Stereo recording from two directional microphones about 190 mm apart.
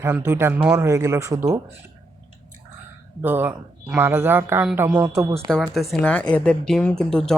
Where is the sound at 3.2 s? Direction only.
10° right (ahead or behind).